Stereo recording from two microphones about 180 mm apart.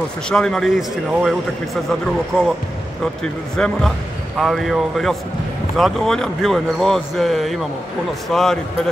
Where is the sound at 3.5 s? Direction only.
5° left (ahead or behind).